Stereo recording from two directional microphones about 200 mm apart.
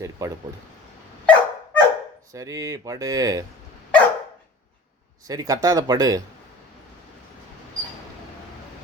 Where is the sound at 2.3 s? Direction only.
15° right (ahead or behind).